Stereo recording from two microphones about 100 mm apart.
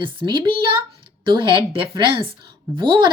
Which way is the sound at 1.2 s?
55° right (ahead or behind).